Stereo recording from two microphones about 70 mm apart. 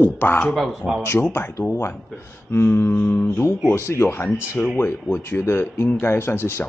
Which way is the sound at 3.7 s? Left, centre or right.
Left.